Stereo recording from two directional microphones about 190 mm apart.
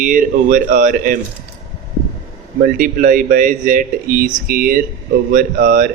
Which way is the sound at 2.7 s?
45° right (ahead or behind).